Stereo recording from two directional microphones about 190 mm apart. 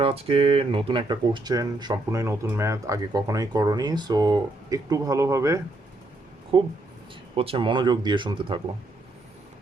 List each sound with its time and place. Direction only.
0.0 s speech: 30° right (ahead or behind)